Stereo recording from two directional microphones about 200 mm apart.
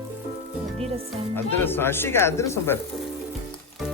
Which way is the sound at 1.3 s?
10° left (ahead or behind).